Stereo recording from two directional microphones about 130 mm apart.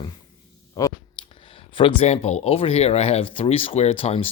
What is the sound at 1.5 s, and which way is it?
Speech, 45° left (ahead or behind).